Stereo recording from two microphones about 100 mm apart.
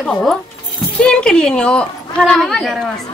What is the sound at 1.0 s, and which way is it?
Speech, 10° left (ahead or behind).